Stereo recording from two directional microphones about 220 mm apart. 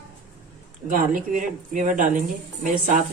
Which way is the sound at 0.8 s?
40° right (ahead or behind).